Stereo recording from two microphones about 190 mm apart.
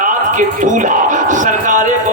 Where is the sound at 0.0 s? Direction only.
45° right (ahead or behind).